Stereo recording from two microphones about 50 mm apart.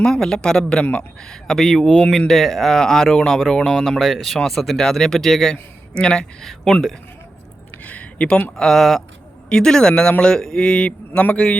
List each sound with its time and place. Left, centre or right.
0.0 s speech: centre
5.9 s a man's voice: centre
6.4 s speech: centre
7.9 s a sound: left
8.5 s speech: centre
9.5 s speech: centre